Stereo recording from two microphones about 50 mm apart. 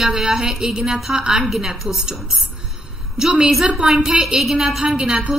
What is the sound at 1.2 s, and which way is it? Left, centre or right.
Speech, centre.